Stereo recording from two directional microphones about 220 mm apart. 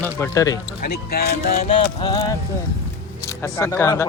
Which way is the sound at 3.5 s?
15° left (ahead or behind).